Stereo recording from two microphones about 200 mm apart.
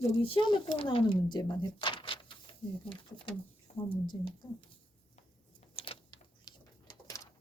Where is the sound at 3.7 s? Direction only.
35° left (ahead or behind).